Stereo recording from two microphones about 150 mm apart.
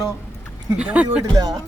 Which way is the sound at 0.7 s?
10° right (ahead or behind).